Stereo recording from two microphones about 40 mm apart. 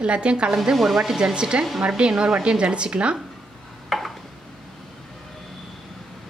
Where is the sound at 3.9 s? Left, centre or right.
Centre.